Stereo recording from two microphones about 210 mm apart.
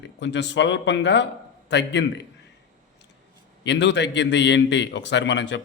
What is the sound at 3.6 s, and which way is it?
A man's voice, 55° left (ahead or behind).